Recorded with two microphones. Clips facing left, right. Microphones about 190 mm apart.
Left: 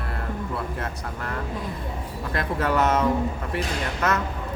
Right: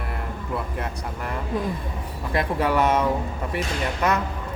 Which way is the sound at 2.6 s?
10° right (ahead or behind).